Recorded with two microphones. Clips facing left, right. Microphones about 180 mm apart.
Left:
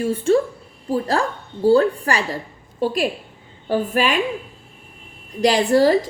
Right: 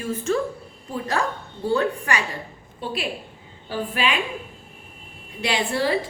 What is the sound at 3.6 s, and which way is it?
Speech, 45° left (ahead or behind).